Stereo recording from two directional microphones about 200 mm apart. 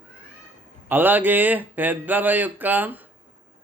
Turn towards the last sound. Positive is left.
turn(degrees=-10)  # may be behind; listen again after turning